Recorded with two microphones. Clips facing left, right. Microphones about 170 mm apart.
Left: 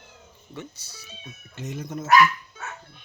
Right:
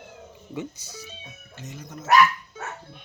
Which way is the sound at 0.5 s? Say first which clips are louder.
Right 5 dB; 20° right (ahead or behind).